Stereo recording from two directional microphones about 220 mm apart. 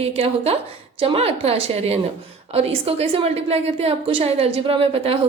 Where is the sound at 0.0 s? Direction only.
25° right (ahead or behind).